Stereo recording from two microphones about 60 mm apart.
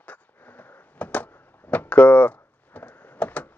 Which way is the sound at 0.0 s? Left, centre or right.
Left.